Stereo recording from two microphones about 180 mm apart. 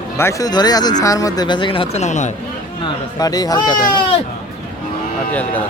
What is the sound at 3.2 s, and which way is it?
Speech, 20° left (ahead or behind).